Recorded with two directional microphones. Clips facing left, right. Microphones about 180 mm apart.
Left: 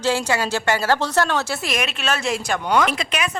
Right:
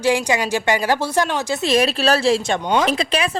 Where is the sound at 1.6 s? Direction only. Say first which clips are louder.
Right 8 dB; 30° right (ahead or behind).